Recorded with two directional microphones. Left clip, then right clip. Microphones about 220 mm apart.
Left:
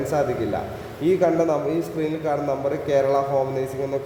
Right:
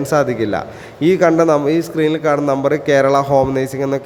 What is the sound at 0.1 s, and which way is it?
A man's voice, 30° right (ahead or behind).